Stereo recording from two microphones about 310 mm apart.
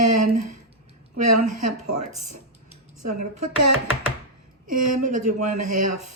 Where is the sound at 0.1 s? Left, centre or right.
Right.